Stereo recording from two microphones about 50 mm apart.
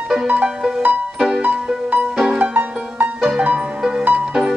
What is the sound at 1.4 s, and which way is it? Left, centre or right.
Music, right.